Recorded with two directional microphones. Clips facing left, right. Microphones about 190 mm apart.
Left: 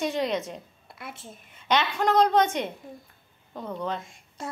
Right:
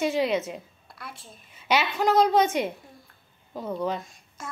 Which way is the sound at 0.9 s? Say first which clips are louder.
Left 2 dB; 20° left (ahead or behind).